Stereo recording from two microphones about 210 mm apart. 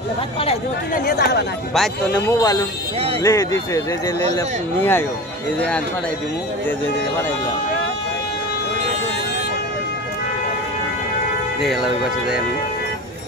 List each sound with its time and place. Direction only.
0.9 s speech: 50° left (ahead or behind)
1.7 s speech: centre (ahead or behind)
2.2 s speech: 15° left (ahead or behind)
11.6 s speech: centre (ahead or behind)